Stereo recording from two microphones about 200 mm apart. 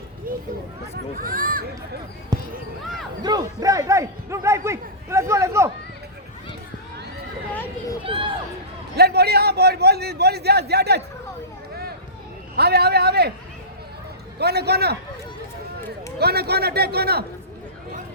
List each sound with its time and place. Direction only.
0.3 s a sound: 45° right (ahead or behind)
1.1 s a man's voice: 45° right (ahead or behind)
2.3 s speech: 20° right (ahead or behind)
7.5 s children playing: 10° left (ahead or behind)
8.0 s speech: 25° right (ahead or behind)
9.0 s a man's voice: 55° right (ahead or behind)
12.5 s a man's voice: 55° right (ahead or behind)
14.3 s a man's voice: 55° right (ahead or behind)
16.1 s a man's voice: 55° right (ahead or behind)